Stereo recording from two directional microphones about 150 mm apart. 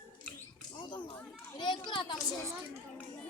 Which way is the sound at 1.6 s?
30° left (ahead or behind).